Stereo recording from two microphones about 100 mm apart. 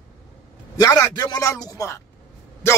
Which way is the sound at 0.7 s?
40° left (ahead or behind).